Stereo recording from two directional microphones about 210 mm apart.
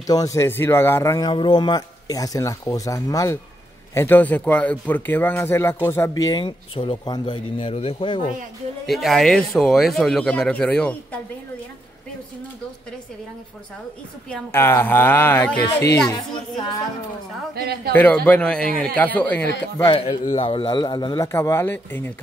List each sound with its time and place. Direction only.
0.0 s speech: 15° left (ahead or behind)
6.2 s a man's voice: 20° left (ahead or behind)
8.8 s speech: centre (ahead or behind)
14.3 s speech: 10° left (ahead or behind)
17.6 s a man's voice: 50° right (ahead or behind)
17.9 s speech: 10° left (ahead or behind)
19.4 s speech: 55° left (ahead or behind)
19.8 s a man's voice: 25° left (ahead or behind); by 22.1 s 10° left (ahead or behind)